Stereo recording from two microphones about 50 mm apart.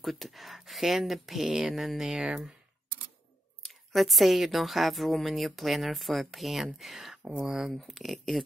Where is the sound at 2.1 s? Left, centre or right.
Centre.